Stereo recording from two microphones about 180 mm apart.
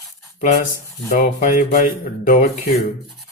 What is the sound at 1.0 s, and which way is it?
Speech, 50° left (ahead or behind).